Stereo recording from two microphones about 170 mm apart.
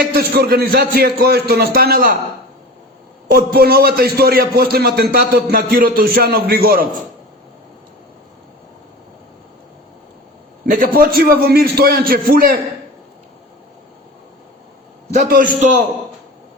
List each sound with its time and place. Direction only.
0.1 s a man's voice: 65° right (ahead or behind)
3.2 s a man's voice: 65° right (ahead or behind)
10.7 s a man's voice: 55° right (ahead or behind)
15.1 s a man's voice: 50° right (ahead or behind)